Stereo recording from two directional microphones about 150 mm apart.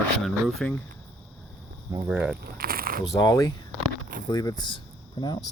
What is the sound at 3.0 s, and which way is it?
Speech, 25° left (ahead or behind).